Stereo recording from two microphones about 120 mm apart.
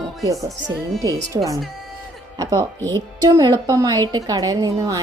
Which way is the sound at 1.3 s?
35° right (ahead or behind).